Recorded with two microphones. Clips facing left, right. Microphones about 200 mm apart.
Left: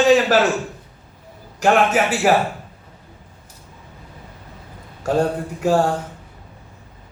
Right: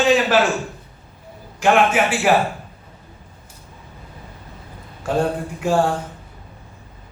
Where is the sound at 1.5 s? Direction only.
40° left (ahead or behind).